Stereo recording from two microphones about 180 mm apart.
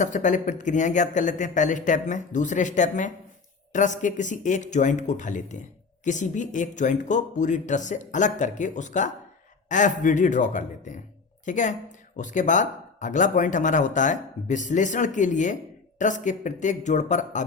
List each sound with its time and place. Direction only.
0.0 s speech: 45° left (ahead or behind)